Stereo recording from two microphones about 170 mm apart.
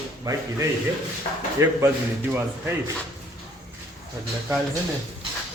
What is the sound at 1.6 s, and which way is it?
Speech, 20° right (ahead or behind).